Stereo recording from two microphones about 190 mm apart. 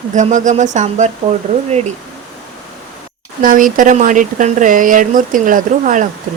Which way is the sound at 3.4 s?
45° right (ahead or behind).